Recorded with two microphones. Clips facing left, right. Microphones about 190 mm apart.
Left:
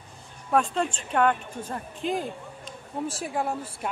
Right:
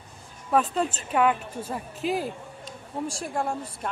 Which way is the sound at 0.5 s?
5° right (ahead or behind).